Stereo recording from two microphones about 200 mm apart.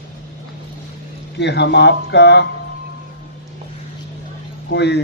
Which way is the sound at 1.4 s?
60° left (ahead or behind).